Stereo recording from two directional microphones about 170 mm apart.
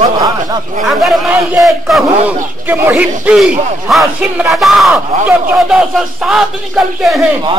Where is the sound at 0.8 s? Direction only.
Centre (ahead or behind).